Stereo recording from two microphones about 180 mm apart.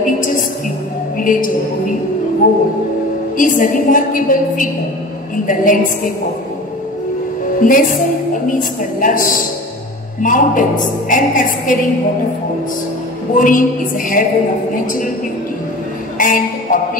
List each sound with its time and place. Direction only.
1.2 s a woman's voice: 50° left (ahead or behind)
7.6 s a woman's voice: 45° left (ahead or behind)
13.3 s a woman's voice: 45° left (ahead or behind)
16.2 s a man's voice: 50° left (ahead or behind)